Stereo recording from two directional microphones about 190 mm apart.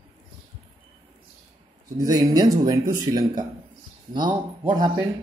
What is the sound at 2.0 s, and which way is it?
Speech, 20° right (ahead or behind).